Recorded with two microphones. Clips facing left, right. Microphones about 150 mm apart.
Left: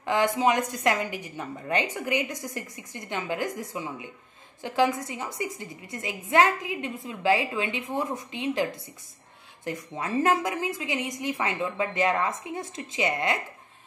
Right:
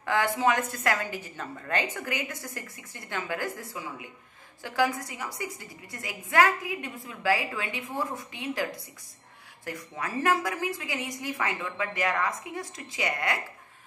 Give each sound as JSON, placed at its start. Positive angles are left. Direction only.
{"t": 0.0, "sound": "a woman's voice", "side_deg": 20}
{"t": 9.7, "sound": "a woman's voice", "side_deg": 25}